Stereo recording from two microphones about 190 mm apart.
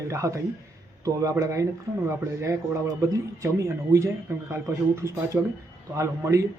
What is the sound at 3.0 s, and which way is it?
A man's voice, 15° right (ahead or behind).